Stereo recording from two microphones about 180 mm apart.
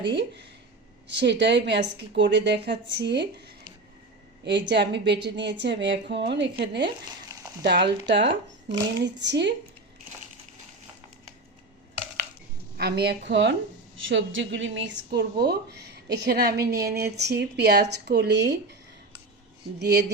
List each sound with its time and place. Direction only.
0.0 s a woman's voice: 70° right (ahead or behind)
12.7 s a woman's voice: 60° right (ahead or behind)